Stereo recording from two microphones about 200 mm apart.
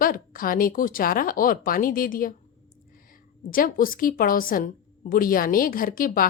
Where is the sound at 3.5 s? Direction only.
45° left (ahead or behind).